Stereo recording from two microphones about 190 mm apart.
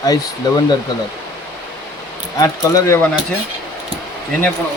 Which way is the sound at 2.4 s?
15° left (ahead or behind).